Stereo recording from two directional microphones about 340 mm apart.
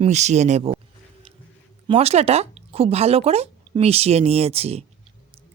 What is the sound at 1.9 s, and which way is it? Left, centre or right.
A woman's voice, centre.